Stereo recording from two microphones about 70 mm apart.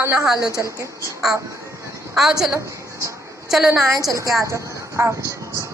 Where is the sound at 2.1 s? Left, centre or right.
Centre.